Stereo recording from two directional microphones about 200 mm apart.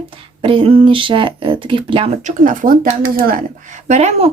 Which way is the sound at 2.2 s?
45° right (ahead or behind).